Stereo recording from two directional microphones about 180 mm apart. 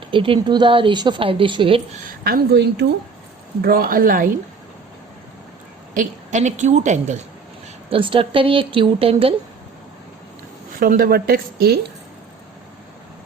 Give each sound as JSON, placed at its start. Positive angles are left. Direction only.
{"t": 0.1, "sound": "speech", "side_deg": -30}
{"t": 2.0, "sound": "a woman's voice", "side_deg": -60}
{"t": 3.6, "sound": "speech", "side_deg": -55}
{"t": 5.9, "sound": "a woman's voice", "side_deg": -45}
{"t": 7.9, "sound": "speech", "side_deg": -30}
{"t": 10.8, "sound": "a woman's voice", "side_deg": -55}